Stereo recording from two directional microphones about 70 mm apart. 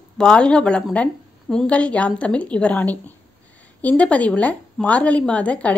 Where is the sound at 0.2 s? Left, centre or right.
Centre.